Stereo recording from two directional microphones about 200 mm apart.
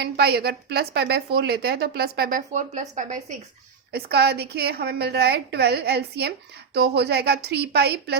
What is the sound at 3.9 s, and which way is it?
A woman's voice, 50° right (ahead or behind).